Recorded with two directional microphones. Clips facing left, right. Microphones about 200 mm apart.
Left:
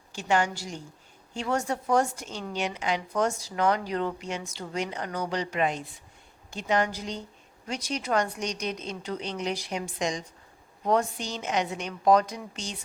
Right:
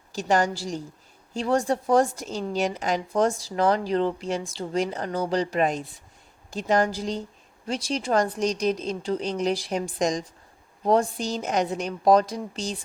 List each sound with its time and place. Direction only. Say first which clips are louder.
0.2 s a woman's voice: right 3 dB; 40° right (ahead or behind)